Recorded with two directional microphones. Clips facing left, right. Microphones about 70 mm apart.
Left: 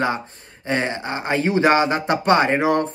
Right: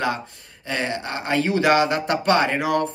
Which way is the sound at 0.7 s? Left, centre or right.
Left.